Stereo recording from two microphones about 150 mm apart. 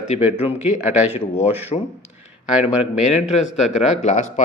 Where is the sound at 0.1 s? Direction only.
45° left (ahead or behind).